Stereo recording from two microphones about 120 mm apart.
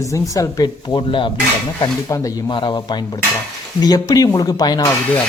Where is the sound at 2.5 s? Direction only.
40° left (ahead or behind).